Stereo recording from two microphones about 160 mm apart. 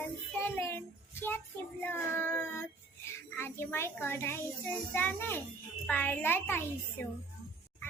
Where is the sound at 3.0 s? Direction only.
15° left (ahead or behind).